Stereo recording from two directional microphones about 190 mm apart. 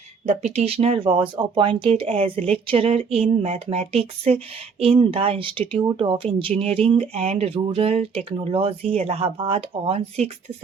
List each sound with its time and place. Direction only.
0.3 s speech: 35° right (ahead or behind)